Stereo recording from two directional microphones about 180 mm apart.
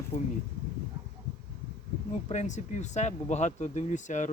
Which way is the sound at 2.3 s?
40° left (ahead or behind).